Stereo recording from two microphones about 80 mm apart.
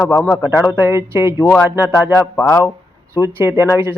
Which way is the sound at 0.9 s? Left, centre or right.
Right.